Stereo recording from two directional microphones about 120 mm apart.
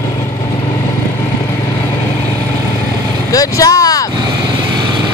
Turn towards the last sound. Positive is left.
turn(degrees=30)  # may be behind; listen again after turning